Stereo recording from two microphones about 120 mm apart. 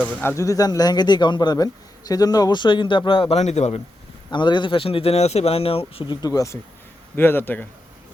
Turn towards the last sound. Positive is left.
turn(degrees=15)  # may be behind; listen again after turning